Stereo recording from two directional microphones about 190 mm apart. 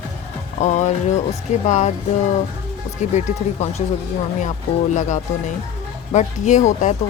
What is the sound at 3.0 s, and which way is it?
Speech, 40° left (ahead or behind).